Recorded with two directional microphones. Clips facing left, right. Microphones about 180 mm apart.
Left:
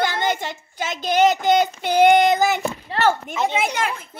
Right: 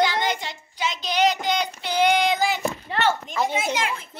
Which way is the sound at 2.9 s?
30° left (ahead or behind).